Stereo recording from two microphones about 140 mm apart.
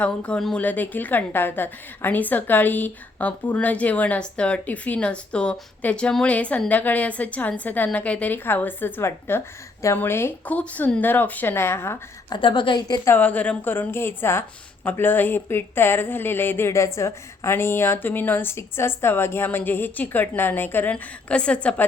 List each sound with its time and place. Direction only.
0.0 s a woman's voice: 10° left (ahead or behind)
12.3 s a woman's voice: 35° left (ahead or behind)
13.1 s a woman's voice: 10° left (ahead or behind)